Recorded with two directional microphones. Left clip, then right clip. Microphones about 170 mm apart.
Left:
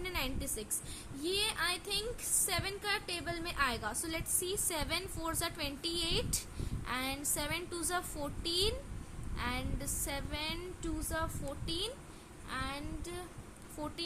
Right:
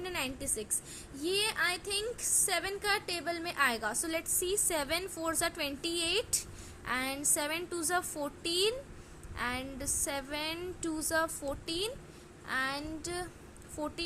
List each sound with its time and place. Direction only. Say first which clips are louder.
0.0 s a woman's voice: right 2 dB; 15° right (ahead or behind)